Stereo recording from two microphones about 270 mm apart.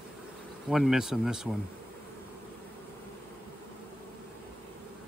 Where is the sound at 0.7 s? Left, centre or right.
Centre.